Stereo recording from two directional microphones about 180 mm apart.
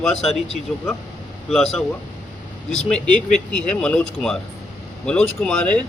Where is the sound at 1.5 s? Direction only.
Centre (ahead or behind).